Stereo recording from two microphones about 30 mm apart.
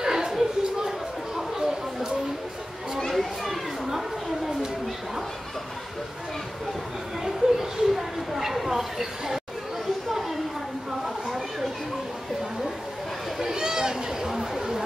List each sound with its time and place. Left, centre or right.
0.0 s a sound: right
0.3 s chatter: centre
3.0 s children playing: centre
7.2 s chatter: centre
8.6 s a sound: centre
13.4 s chatter: right